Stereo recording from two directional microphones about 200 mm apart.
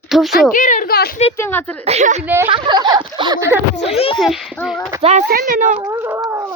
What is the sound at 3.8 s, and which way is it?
Speech, 30° left (ahead or behind).